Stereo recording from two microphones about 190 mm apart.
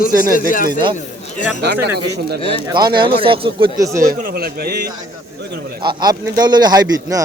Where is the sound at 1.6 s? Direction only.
60° right (ahead or behind).